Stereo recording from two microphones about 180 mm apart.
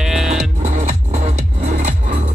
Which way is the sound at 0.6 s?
40° right (ahead or behind).